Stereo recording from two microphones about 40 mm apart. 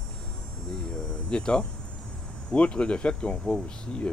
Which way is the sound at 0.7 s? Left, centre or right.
Centre.